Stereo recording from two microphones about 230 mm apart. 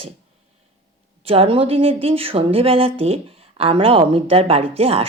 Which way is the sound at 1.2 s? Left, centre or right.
Right.